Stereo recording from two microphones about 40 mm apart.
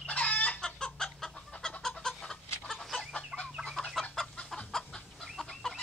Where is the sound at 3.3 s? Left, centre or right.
Right.